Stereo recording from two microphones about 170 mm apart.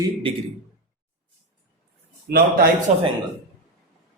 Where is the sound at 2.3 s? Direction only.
65° right (ahead or behind).